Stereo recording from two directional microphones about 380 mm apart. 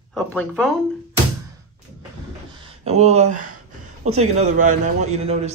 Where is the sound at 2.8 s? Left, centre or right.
Centre.